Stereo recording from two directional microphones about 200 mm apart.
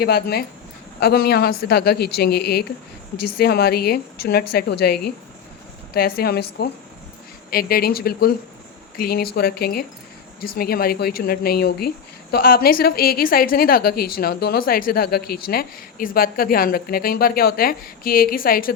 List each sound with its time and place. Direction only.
0.0 s speech: 50° left (ahead or behind)
7.5 s speech: 50° left (ahead or behind)